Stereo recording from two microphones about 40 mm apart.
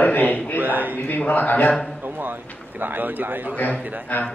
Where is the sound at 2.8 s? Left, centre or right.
Right.